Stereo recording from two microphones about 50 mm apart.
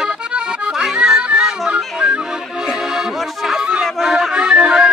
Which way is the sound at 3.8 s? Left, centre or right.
Centre.